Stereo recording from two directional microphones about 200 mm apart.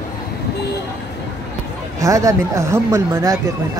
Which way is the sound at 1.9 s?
15° right (ahead or behind).